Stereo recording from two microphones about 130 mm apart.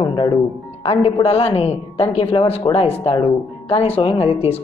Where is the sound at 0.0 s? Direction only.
40° left (ahead or behind).